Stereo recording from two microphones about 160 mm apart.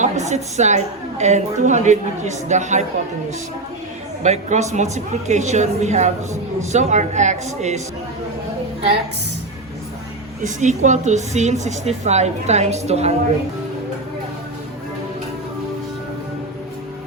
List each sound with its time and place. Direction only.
0.0 s a woman's voice: 45° right (ahead or behind)
4.2 s a woman's voice: 50° right (ahead or behind)
10.4 s a woman's voice: 50° right (ahead or behind)